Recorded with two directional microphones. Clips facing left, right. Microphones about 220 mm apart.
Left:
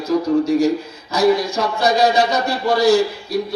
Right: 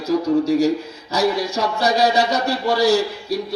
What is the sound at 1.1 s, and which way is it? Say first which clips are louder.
A man's voice: left 4 dB; 40° right (ahead or behind).